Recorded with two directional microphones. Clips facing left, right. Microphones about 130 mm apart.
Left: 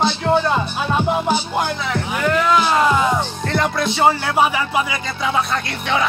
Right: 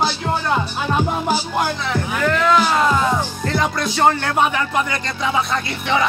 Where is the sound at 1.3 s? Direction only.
5° right (ahead or behind).